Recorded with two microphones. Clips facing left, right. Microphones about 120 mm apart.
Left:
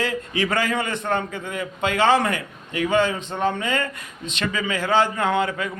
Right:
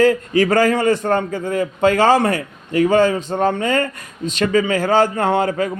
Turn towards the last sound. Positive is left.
turn(degrees=-40)  # may be behind; listen again after turning